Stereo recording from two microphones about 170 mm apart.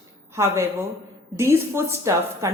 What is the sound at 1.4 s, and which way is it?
Speech, 15° right (ahead or behind).